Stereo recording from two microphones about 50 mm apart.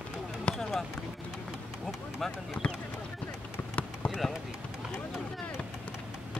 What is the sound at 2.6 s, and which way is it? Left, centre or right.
Speech, centre.